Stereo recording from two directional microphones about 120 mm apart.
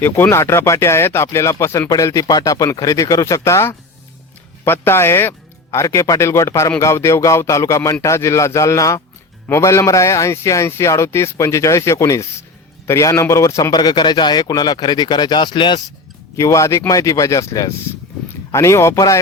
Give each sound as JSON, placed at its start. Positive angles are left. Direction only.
{"t": 0.0, "sound": "a man's voice", "side_deg": 20}
{"t": 16.4, "sound": "a man's voice", "side_deg": 25}